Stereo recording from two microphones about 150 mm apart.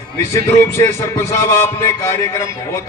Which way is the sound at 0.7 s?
20° left (ahead or behind).